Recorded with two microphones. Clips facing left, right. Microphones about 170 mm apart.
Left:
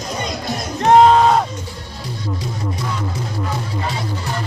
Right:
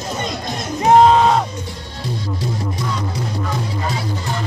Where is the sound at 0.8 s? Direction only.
Centre (ahead or behind).